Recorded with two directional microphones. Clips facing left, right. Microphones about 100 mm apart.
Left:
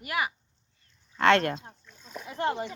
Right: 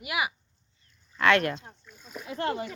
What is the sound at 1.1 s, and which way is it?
Speech, 30° left (ahead or behind).